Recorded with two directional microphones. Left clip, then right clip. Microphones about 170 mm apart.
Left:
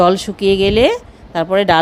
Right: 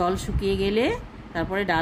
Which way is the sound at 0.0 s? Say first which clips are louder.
Left 12 dB; 35° left (ahead or behind).